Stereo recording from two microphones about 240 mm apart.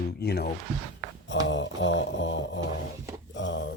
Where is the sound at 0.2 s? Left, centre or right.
Left.